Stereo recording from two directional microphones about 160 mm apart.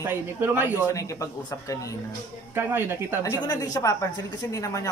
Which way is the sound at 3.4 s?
20° left (ahead or behind).